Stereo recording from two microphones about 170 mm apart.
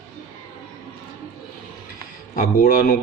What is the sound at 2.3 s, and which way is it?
Speech, 55° left (ahead or behind).